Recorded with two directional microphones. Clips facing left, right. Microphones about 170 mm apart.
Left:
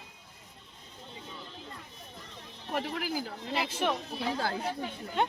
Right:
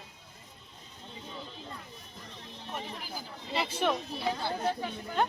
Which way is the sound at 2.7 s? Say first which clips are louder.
Left 8 dB; 90° left.